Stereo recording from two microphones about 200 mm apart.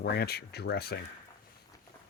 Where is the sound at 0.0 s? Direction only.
55° left (ahead or behind).